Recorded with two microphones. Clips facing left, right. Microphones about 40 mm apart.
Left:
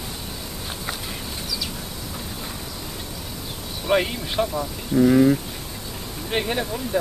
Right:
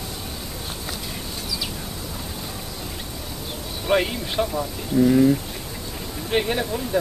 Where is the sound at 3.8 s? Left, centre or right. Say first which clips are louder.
Even; centre.